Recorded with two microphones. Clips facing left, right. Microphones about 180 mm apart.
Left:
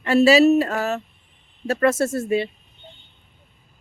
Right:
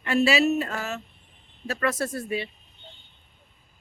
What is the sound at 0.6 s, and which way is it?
Speech, 65° left (ahead or behind).